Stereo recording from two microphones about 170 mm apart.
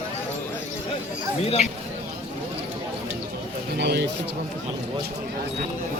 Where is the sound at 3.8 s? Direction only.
75° right (ahead or behind).